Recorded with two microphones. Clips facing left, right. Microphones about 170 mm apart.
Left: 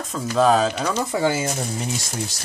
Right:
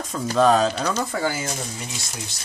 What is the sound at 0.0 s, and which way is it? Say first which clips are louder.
Speech: even; centre (ahead or behind).